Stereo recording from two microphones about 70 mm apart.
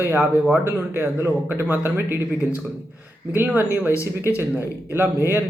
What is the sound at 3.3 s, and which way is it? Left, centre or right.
A man's voice, right.